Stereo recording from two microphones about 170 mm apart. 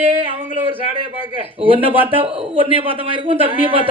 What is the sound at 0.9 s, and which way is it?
A man's voice, 30° right (ahead or behind).